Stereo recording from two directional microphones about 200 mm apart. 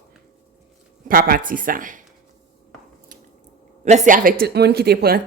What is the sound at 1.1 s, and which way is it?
Speech, 45° right (ahead or behind).